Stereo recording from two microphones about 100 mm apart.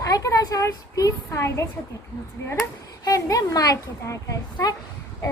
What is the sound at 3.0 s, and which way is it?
A woman's voice, 35° left (ahead or behind).